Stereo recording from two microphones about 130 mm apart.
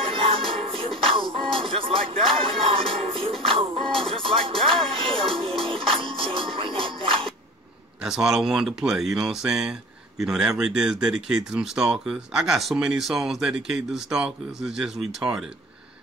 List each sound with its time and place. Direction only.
0.1 s music: 45° right (ahead or behind)
8.0 s speech: 5° right (ahead or behind)